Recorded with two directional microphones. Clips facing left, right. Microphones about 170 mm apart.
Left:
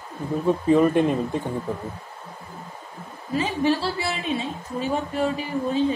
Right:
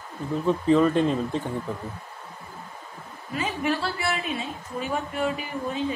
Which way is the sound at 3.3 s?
30° left (ahead or behind).